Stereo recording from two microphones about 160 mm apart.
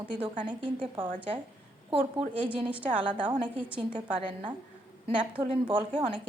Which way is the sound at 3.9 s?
30° right (ahead or behind).